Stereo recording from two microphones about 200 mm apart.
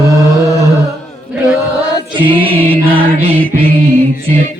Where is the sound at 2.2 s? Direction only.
25° right (ahead or behind).